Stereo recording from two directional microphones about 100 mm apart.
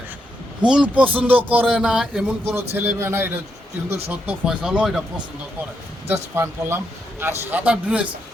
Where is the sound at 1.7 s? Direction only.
5° right (ahead or behind).